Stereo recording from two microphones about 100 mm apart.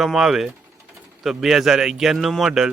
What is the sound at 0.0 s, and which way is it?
Speech, 5° right (ahead or behind).